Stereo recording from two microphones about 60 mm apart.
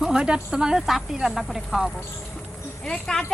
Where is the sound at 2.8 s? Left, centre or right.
Centre.